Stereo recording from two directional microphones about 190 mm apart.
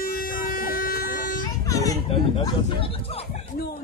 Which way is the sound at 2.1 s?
30° left (ahead or behind).